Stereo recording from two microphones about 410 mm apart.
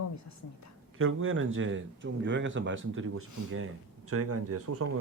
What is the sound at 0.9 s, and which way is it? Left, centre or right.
Speech, right.